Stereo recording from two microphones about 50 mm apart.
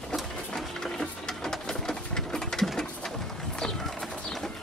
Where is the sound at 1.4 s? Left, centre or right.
Centre.